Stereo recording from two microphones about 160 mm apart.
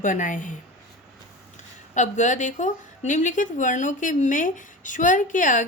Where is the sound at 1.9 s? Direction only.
50° left (ahead or behind).